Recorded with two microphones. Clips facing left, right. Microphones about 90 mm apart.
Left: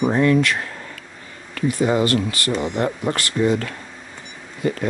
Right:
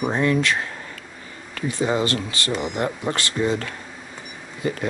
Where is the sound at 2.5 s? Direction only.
35° left (ahead or behind).